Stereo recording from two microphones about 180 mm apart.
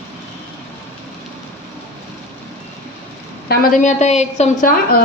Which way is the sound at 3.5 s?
45° left (ahead or behind).